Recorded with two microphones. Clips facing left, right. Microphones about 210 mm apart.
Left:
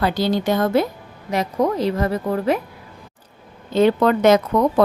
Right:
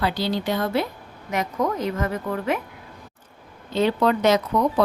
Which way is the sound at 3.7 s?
50° left (ahead or behind).